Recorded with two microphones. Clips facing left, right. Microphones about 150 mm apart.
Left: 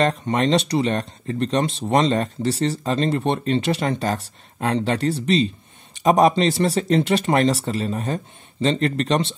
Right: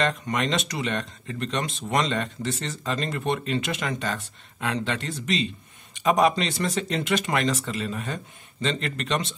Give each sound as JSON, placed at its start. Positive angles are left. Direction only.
{"t": 0.0, "sound": "speech", "side_deg": 35}